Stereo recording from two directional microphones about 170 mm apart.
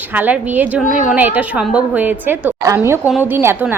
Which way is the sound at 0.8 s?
50° left (ahead or behind).